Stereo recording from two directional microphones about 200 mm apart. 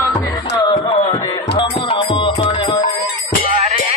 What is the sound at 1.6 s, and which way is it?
Music, 25° left (ahead or behind).